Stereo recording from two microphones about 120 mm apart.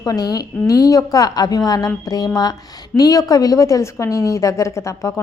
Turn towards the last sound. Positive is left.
turn(degrees=25)  # may be behind; listen again after turning